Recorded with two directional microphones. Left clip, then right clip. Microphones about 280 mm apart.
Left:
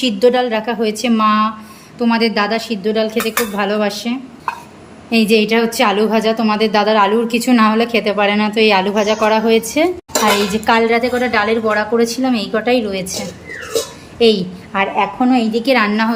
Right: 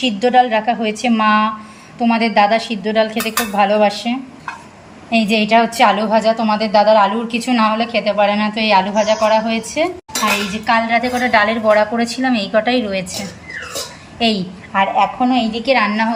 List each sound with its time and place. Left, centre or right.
0.0 s a woman's voice: centre
14.2 s a woman's voice: centre